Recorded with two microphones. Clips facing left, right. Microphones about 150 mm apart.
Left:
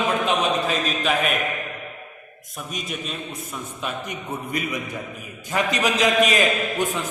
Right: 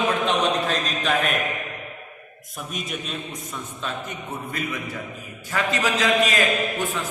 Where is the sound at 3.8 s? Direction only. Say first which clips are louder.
Left 1 dB; 15° left (ahead or behind).